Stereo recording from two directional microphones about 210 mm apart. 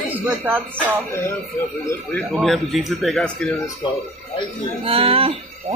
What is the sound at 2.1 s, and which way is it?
Speech, centre (ahead or behind).